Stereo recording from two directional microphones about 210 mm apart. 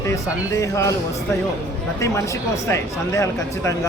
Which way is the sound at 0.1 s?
15° left (ahead or behind).